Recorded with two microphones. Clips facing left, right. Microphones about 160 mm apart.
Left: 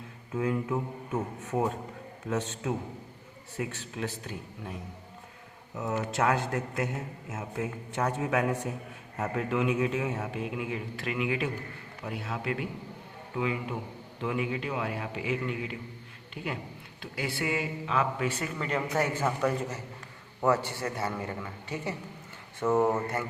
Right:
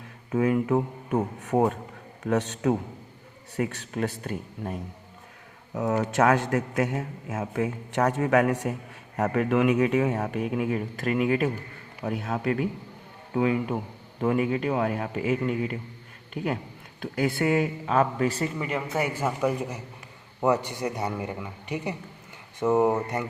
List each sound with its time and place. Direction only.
0.3 s speech: 65° right (ahead or behind)
6.2 s speech: 70° right (ahead or behind)
7.3 s speech: 60° right (ahead or behind); by 18.5 s 35° right (ahead or behind)
18.6 s a man's voice: 10° right (ahead or behind)